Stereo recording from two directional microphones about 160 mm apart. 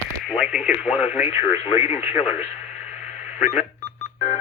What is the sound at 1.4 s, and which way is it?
Speech, 40° left (ahead or behind).